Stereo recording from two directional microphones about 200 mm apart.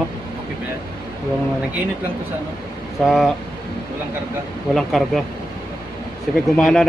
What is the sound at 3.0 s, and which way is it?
Speech, centre (ahead or behind).